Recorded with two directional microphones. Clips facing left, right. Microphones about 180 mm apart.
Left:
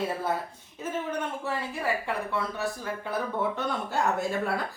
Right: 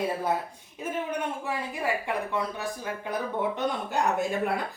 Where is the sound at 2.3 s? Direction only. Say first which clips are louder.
Even; 15° right (ahead or behind).